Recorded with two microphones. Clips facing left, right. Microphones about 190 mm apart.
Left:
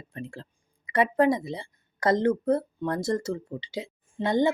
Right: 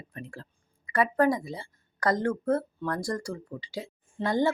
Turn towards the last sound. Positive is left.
turn(degrees=20)  # may be behind; listen again after turning